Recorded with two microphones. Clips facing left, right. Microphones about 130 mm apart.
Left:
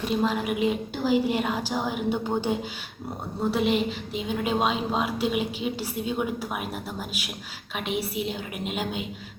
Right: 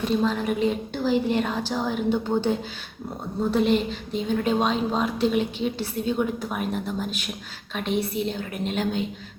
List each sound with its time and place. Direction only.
0.2 s a woman's voice: 10° left (ahead or behind)